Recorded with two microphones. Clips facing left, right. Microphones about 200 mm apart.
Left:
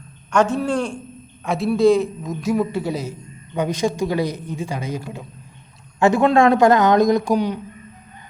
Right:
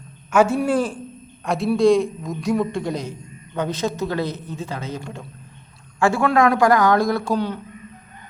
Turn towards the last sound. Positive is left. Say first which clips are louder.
# left 4 dB
turn(degrees=15)  # may be behind; listen again after turning